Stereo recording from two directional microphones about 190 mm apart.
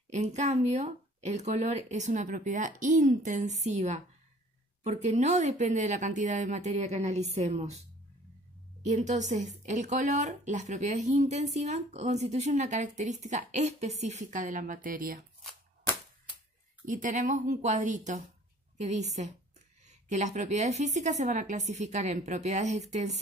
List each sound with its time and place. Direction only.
0.1 s a woman's voice: 40° right (ahead or behind)
8.8 s a woman's voice: 40° right (ahead or behind)
16.8 s a woman's voice: 45° right (ahead or behind)